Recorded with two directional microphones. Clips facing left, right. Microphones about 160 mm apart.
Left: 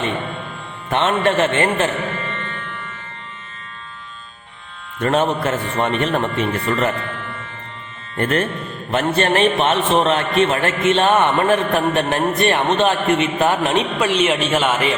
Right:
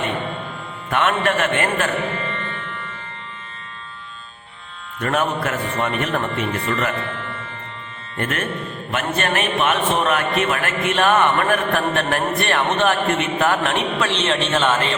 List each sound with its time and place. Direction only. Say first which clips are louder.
0.9 s a man's voice: left 2 dB; 25° left (ahead or behind)
4.9 s a man's voice: left 4 dB; 30° left (ahead or behind)
8.2 s a man's voice: left 5 dB; 35° left (ahead or behind); by 14.9 s 10° left (ahead or behind)